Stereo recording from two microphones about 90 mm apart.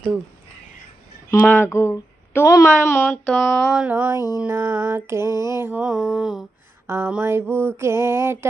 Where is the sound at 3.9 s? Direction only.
20° right (ahead or behind).